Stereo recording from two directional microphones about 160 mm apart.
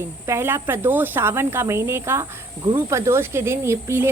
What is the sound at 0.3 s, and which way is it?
Speech, 15° right (ahead or behind).